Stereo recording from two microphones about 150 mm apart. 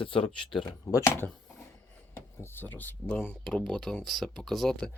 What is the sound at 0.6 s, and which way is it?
Speech, 20° left (ahead or behind).